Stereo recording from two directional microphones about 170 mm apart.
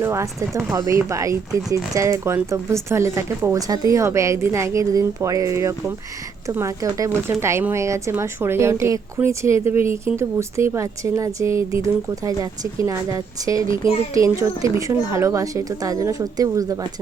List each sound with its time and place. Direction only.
0.0 s a woman's voice: 15° right (ahead or behind)